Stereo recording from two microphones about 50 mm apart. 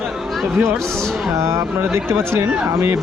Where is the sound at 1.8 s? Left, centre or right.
Right.